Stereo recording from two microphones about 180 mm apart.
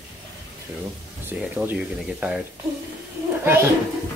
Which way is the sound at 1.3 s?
10° right (ahead or behind).